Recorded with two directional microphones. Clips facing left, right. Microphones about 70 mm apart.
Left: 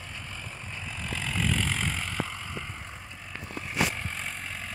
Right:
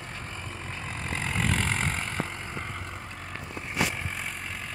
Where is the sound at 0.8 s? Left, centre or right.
Right.